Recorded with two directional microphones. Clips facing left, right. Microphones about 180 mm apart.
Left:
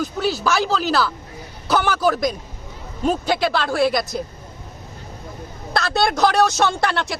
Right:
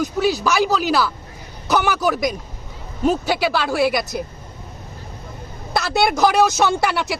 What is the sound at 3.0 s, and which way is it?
Speech, 10° right (ahead or behind).